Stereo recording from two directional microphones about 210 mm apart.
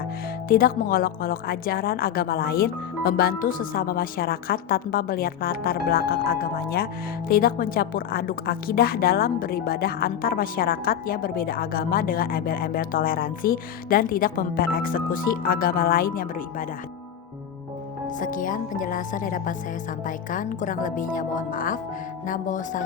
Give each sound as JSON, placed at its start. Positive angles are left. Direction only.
{"t": 0.4, "sound": "speech", "side_deg": 45}
{"t": 18.2, "sound": "speech", "side_deg": 40}